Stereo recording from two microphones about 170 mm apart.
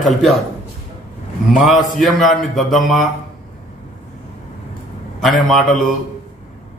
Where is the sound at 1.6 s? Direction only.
Centre (ahead or behind).